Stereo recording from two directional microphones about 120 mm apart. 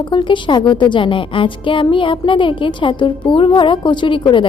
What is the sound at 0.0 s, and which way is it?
A woman's voice, 40° left (ahead or behind).